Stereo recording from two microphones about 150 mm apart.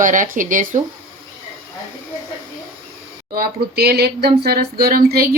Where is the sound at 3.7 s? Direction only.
90° right.